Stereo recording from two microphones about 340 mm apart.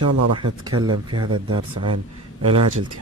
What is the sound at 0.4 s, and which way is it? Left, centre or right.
Speech, centre.